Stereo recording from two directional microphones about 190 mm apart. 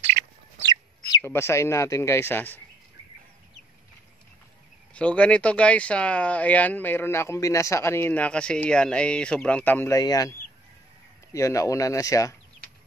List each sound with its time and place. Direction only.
1.0 s speech: 15° left (ahead or behind)
4.9 s speech: 5° left (ahead or behind)
11.3 s speech: 15° left (ahead or behind)